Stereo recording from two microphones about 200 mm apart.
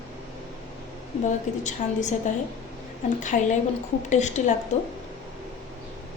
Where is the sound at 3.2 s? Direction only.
40° left (ahead or behind).